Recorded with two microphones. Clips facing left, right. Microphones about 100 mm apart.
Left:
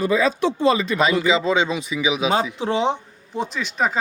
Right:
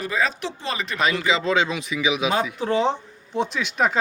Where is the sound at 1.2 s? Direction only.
5° left (ahead or behind).